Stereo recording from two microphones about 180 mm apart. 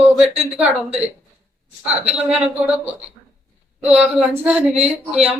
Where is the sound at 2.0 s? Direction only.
35° right (ahead or behind).